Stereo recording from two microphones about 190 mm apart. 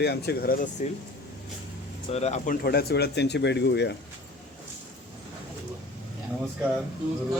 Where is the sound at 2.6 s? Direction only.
55° left (ahead or behind).